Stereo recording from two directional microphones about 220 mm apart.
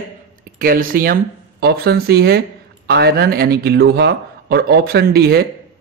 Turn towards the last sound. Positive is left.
turn(degrees=-45)  # may be behind; listen again after turning